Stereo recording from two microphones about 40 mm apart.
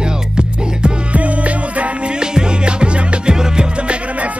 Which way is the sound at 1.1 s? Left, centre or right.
Right.